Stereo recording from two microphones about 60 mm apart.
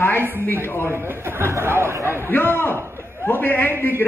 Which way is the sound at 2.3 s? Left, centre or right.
Left.